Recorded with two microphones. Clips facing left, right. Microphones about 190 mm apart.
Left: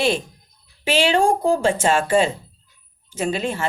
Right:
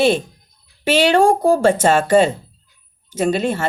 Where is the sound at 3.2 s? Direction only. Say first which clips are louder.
Right 5 dB; 40° right (ahead or behind).